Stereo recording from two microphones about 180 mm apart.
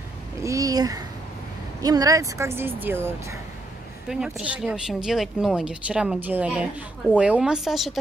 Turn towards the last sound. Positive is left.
turn(degrees=0)  # may be behind; listen again after turning